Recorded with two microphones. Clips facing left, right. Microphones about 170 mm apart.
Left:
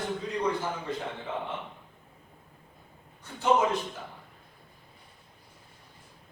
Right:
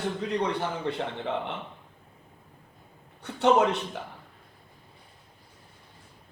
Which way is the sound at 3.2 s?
70° right (ahead or behind).